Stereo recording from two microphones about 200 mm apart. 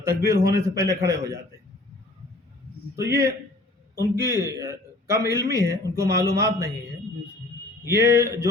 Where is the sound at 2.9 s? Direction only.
15° right (ahead or behind).